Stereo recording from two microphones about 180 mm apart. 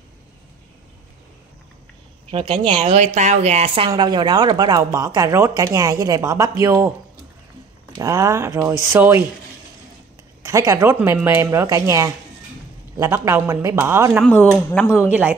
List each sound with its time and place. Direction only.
2.3 s speech: 30° right (ahead or behind)
2.8 s a man's voice: 40° right (ahead or behind); by 6.9 s 15° right (ahead or behind)
8.0 s a man's voice: 15° right (ahead or behind)
10.4 s a man's voice: 15° right (ahead or behind)
14.2 s speech: 5° left (ahead or behind)